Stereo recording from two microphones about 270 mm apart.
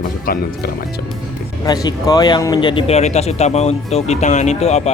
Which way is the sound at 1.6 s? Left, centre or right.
Centre.